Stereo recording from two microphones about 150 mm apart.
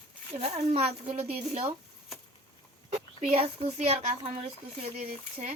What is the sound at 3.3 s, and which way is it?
Speech, 40° right (ahead or behind).